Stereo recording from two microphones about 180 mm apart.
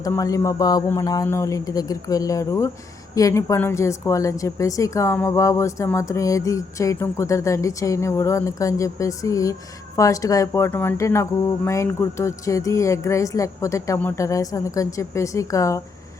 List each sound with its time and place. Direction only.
0.0 s a woman's voice: 20° left (ahead or behind)